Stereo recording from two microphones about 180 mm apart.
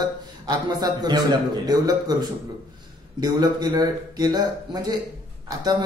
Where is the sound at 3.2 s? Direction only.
25° right (ahead or behind).